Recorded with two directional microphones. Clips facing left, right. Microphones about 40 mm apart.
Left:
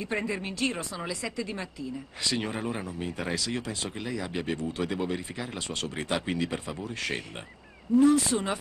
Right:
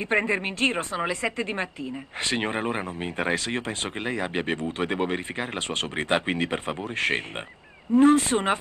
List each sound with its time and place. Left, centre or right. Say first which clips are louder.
0.1 s speech: right 8 dB; right